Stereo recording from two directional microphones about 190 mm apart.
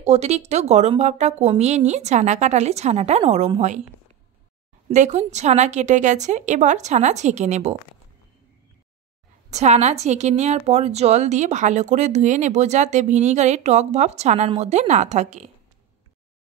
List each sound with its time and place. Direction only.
0.0 s a woman's voice: 35° right (ahead or behind)
4.8 s a woman's voice: 40° right (ahead or behind)
9.5 s a woman's voice: 35° right (ahead or behind)